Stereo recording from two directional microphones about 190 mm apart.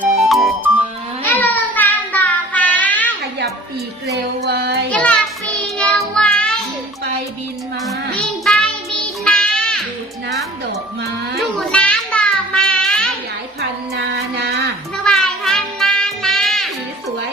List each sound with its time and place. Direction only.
0.0 s music: centre (ahead or behind)
1.2 s child singing: 10° left (ahead or behind)
4.0 s music: 60° right (ahead or behind)
4.9 s child singing: 5° left (ahead or behind)
6.1 s music: 5° left (ahead or behind)
7.9 s music: centre (ahead or behind)
11.4 s child singing: 5° left (ahead or behind)
13.6 s a sound: 60° right (ahead or behind)
14.9 s music: 5° left (ahead or behind)